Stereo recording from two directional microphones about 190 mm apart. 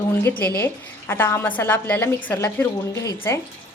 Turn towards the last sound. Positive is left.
turn(degrees=15)  # may be behind; listen again after turning